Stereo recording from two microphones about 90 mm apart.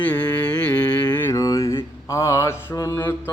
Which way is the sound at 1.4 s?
40° left (ahead or behind).